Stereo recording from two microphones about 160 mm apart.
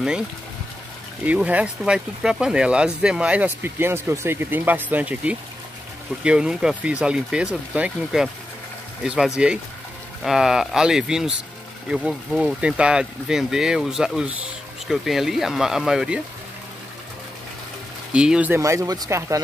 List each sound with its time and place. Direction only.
1.2 s speech: 10° right (ahead or behind)
18.1 s speech: 5° right (ahead or behind)
18.6 s speech: 20° right (ahead or behind)